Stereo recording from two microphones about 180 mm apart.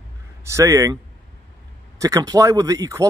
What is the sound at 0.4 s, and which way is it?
Speech, 15° right (ahead or behind).